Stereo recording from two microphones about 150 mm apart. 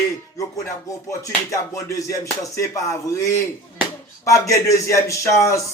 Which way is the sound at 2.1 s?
20° left (ahead or behind).